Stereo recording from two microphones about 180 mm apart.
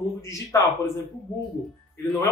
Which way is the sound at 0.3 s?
15° left (ahead or behind).